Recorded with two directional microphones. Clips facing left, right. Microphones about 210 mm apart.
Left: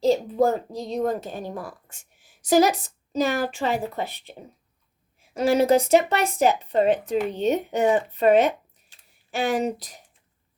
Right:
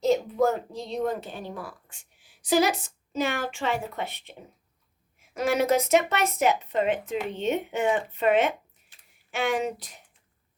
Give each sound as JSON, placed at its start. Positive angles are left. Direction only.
{"t": 0.0, "sound": "a woman's voice", "side_deg": 30}